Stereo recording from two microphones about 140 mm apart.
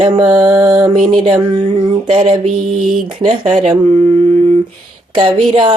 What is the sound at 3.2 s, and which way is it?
Speech, 60° right (ahead or behind).